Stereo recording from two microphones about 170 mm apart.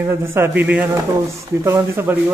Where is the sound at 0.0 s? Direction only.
15° right (ahead or behind).